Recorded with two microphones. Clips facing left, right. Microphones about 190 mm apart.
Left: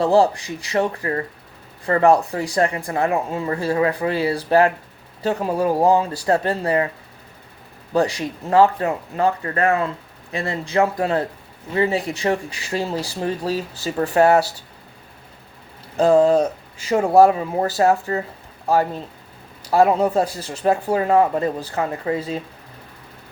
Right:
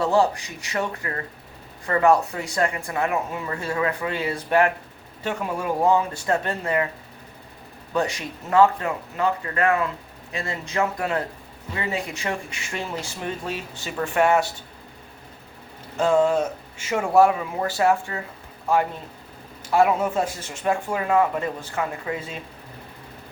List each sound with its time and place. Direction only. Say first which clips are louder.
0.0 s a woman's voice: left 4 dB; 35° left (ahead or behind)
7.9 s a woman's voice: left 5 dB; 35° left (ahead or behind)
16.0 s a woman's voice: left 5 dB; 35° left (ahead or behind)